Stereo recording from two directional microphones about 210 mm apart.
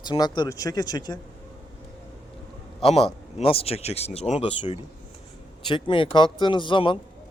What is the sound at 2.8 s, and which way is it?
Speech, 30° left (ahead or behind).